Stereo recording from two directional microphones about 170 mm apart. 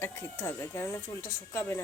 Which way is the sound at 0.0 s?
15° left (ahead or behind).